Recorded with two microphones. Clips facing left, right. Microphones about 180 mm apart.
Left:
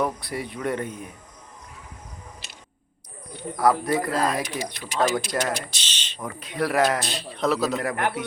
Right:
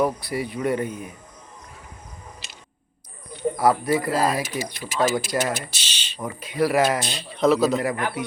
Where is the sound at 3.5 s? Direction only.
5° right (ahead or behind).